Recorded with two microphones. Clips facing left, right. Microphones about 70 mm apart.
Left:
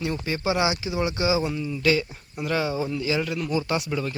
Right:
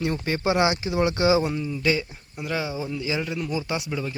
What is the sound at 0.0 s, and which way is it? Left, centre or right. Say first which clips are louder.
Speech: right 2 dB; right.